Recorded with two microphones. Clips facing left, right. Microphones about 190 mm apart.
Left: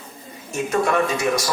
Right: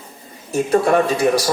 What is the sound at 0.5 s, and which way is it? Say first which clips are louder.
Speech: right 5 dB; 35° right (ahead or behind).